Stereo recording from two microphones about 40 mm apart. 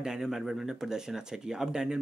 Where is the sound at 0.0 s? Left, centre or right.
Centre.